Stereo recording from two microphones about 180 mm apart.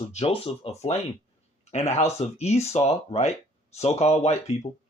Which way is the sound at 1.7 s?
35° left (ahead or behind).